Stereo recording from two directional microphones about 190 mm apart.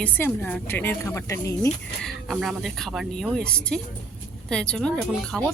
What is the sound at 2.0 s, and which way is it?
Speech, centre (ahead or behind).